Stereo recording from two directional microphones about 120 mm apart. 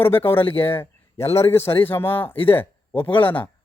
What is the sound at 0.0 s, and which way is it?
A man's voice, 20° left (ahead or behind).